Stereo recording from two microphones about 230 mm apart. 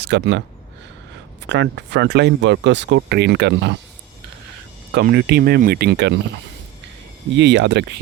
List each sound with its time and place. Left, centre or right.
0.0 s speech: right
1.5 s speech: right
4.9 s speech: right
7.3 s speech: right